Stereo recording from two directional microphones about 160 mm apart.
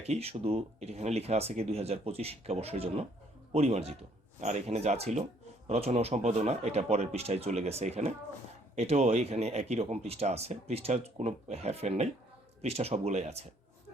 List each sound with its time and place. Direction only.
0.0 s speech: 40° right (ahead or behind)